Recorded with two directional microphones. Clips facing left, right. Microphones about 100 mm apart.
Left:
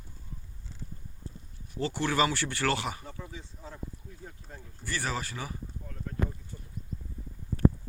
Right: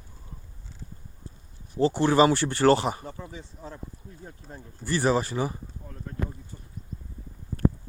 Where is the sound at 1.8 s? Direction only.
30° right (ahead or behind).